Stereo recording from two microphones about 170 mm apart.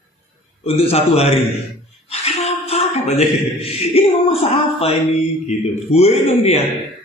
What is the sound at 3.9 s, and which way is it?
A man's voice, 35° left (ahead or behind).